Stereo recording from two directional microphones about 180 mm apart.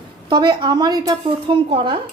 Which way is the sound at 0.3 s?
25° right (ahead or behind).